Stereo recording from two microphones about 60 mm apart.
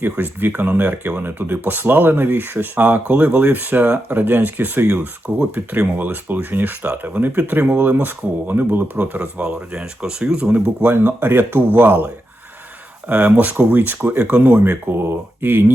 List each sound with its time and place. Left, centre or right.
0.0 s speech: right
4.9 s speech: centre
9.2 s speech: centre
10.8 s speech: right
14.2 s speech: right